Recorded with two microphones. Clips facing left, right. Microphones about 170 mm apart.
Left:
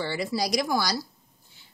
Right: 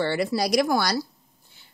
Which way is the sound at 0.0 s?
65° right (ahead or behind).